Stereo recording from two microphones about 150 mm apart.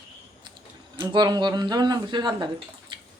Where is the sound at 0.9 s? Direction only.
30° right (ahead or behind).